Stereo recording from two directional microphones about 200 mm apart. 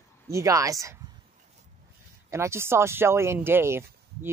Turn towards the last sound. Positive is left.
turn(degrees=-10)  # may be behind; listen again after turning